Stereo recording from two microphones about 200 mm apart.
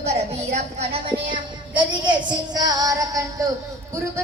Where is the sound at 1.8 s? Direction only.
25° right (ahead or behind).